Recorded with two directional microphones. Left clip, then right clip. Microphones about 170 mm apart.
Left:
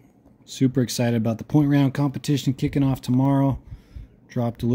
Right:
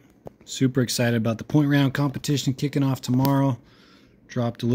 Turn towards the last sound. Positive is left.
turn(degrees=15)  # may be behind; listen again after turning